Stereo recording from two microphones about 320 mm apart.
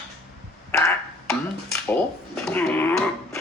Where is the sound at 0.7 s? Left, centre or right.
Centre.